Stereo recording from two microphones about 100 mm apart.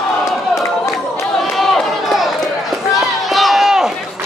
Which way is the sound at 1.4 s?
Centre (ahead or behind).